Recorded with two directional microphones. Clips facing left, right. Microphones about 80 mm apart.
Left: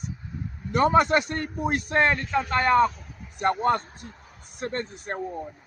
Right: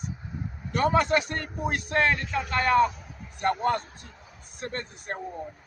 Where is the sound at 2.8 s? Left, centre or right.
Centre.